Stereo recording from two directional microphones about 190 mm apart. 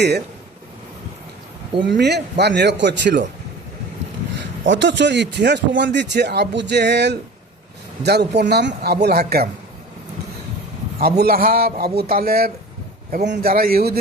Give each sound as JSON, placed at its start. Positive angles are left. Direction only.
{"t": 1.8, "sound": "a man's voice", "side_deg": -65}
{"t": 4.6, "sound": "speech", "side_deg": -75}
{"t": 11.2, "sound": "a man's voice", "side_deg": -50}